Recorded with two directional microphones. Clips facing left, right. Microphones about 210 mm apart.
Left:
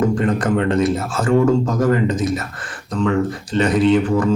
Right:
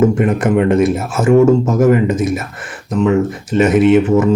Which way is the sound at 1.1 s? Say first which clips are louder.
Right 6 dB; 25° right (ahead or behind).